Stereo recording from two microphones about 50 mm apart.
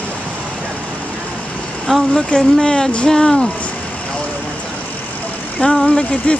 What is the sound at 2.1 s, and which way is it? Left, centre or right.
Speech, centre.